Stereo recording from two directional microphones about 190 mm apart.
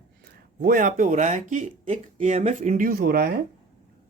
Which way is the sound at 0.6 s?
45° right (ahead or behind).